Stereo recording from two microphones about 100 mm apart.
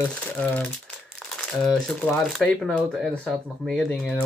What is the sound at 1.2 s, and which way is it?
Speech, 5° left (ahead or behind).